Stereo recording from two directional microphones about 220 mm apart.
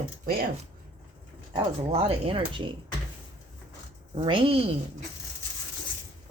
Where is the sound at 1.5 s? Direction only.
25° right (ahead or behind).